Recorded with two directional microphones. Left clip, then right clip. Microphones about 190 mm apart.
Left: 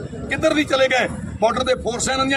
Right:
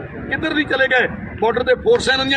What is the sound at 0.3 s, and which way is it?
A man's voice, 20° left (ahead or behind).